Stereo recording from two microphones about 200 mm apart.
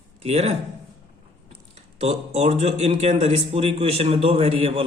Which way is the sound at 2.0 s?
30° right (ahead or behind).